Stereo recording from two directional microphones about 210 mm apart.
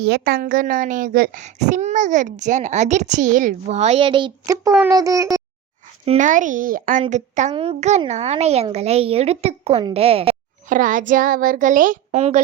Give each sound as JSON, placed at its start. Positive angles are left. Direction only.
{"t": 0.0, "sound": "speech", "side_deg": -50}
{"t": 6.1, "sound": "a child's voice", "side_deg": -35}
{"t": 10.8, "sound": "speech", "side_deg": -40}